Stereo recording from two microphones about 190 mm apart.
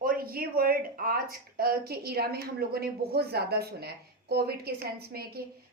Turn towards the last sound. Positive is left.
turn(degrees=-55)  # may be behind; listen again after turning